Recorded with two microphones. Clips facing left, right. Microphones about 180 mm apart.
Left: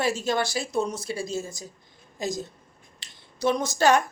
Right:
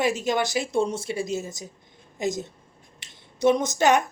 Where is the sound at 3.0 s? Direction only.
25° right (ahead or behind).